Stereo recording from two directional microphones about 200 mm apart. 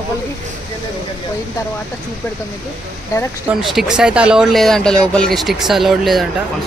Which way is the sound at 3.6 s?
Centre (ahead or behind).